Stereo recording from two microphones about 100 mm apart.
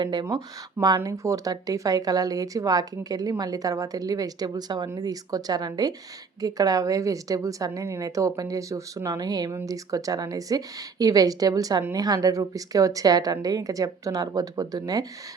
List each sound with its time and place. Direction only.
0.0 s speech: 45° right (ahead or behind)